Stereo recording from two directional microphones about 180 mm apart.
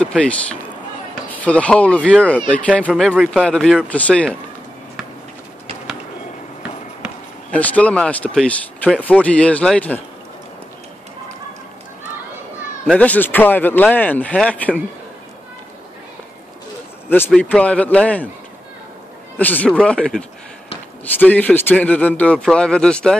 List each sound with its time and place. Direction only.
0.0 s speech: 5° left (ahead or behind)
7.5 s speech: 10° left (ahead or behind)
12.8 s speech: 5° left (ahead or behind)
17.4 s speech: 5° left (ahead or behind)
19.3 s speech: 10° left (ahead or behind)